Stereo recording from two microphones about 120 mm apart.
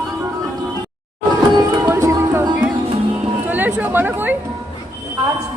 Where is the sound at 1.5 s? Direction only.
30° right (ahead or behind).